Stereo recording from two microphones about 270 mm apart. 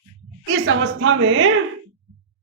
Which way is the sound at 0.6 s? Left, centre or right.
Right.